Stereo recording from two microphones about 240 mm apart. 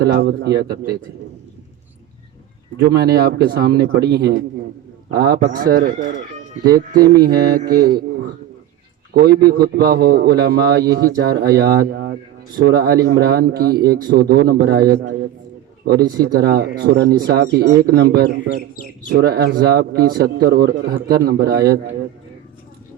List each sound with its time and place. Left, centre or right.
0.0 s a man's voice: right
2.8 s speech: right
6.7 s speech: centre
7.5 s a man's voice: right
21.5 s speech: centre